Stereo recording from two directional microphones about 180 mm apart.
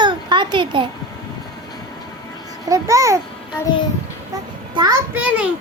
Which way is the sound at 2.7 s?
15° right (ahead or behind).